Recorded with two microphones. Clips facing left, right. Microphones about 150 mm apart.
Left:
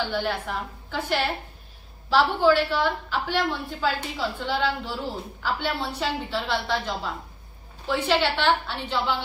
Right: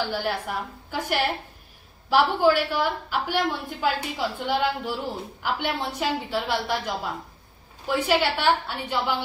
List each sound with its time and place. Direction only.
0.0 s a woman's voice: 10° right (ahead or behind)
7.8 s a woman's voice: 10° right (ahead or behind)